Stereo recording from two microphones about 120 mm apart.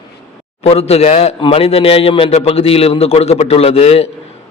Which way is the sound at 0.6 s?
60° left (ahead or behind).